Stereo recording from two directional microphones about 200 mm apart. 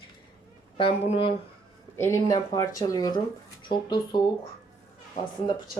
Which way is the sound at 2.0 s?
15° left (ahead or behind).